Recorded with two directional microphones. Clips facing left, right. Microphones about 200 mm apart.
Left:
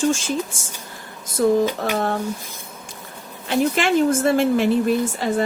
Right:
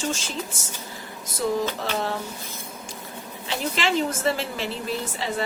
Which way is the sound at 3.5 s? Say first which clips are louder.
Left 7 dB; 55° left (ahead or behind).